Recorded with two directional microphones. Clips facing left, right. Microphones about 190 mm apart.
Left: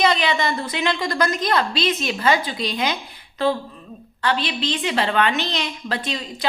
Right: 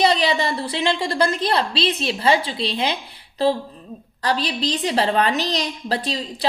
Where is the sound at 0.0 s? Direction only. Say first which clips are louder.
Right 1 dB; 35° right (ahead or behind).